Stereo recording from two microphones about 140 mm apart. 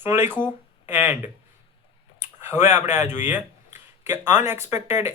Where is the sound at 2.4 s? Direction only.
20° right (ahead or behind).